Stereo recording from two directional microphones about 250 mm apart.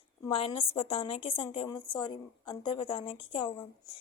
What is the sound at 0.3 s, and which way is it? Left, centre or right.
A woman's voice, left.